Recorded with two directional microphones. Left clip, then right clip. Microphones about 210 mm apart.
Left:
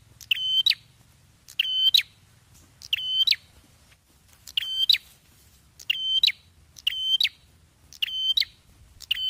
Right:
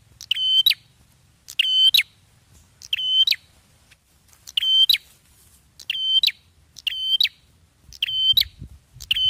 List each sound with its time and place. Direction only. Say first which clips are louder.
0.3 s bird: right 4 dB; 20° right (ahead or behind)
2.8 s bird: right 5 dB; centre (ahead or behind)
4.5 s smoke detector: right 6 dB; 15° right (ahead or behind)
5.8 s bird: right 3 dB; 20° right (ahead or behind)
7.9 s smoke detector: right 6 dB; 10° right (ahead or behind)
8.9 s smoke detector: right 7 dB; 25° right (ahead or behind)